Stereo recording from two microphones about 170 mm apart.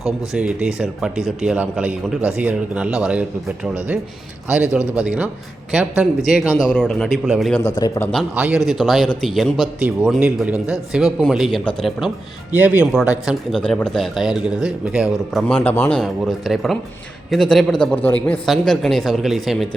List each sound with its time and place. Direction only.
0.0 s a man's voice: 5° right (ahead or behind)
6.7 s a man's voice: 5° left (ahead or behind)
7.8 s a man's voice: 20° left (ahead or behind)
8.4 s a man's voice: 5° right (ahead or behind)